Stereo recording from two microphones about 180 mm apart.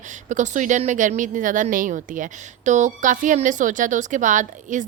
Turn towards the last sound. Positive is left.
turn(degrees=-45)  # may be behind; listen again after turning